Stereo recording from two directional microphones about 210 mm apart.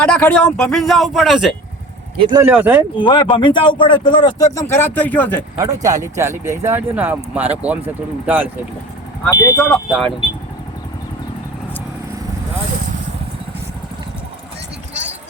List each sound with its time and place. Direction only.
0.0 s speech: 5° left (ahead or behind)
2.2 s speech: 20° right (ahead or behind)
2.5 s speech: 5° right (ahead or behind)
3.0 s speech: 20° left (ahead or behind)
5.5 s speech: 15° right (ahead or behind)
9.2 s speech: 10° left (ahead or behind)
9.6 s speech: centre (ahead or behind)